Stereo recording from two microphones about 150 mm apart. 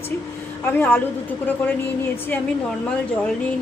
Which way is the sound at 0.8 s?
15° left (ahead or behind).